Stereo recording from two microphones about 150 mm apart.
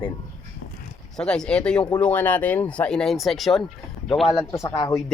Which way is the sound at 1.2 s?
5° left (ahead or behind).